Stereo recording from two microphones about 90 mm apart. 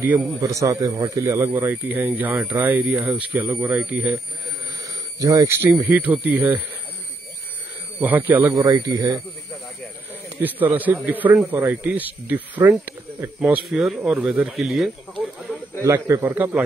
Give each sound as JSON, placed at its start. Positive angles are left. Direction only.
{"t": 0.0, "sound": "speech", "side_deg": -20}
{"t": 0.4, "sound": "a man's voice", "side_deg": -40}
{"t": 1.5, "sound": "speech", "side_deg": -20}
{"t": 5.2, "sound": "a man's voice", "side_deg": -40}
{"t": 5.6, "sound": "speech", "side_deg": -25}
{"t": 8.0, "sound": "speech", "side_deg": -20}
{"t": 8.5, "sound": "speech", "side_deg": -45}
{"t": 10.4, "sound": "speech", "side_deg": -20}
{"t": 13.7, "sound": "speech", "side_deg": -5}
{"t": 13.9, "sound": "speech", "side_deg": -15}
{"t": 14.5, "sound": "speech", "side_deg": 0}
{"t": 15.8, "sound": "speech", "side_deg": -35}